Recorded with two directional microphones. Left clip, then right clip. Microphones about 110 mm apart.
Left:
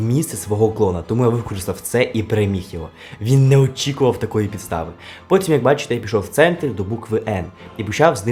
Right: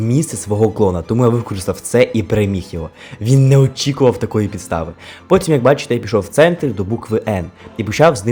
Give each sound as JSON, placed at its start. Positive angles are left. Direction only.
{"t": 0.1, "sound": "speech", "side_deg": -25}